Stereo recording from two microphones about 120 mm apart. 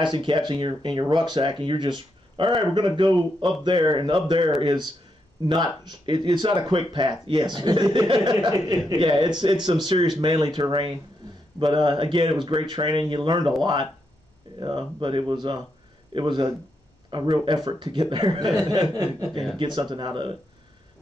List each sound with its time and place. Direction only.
0.0 s speech: 40° right (ahead or behind)
19.3 s speech: centre (ahead or behind)
19.6 s speech: 40° right (ahead or behind)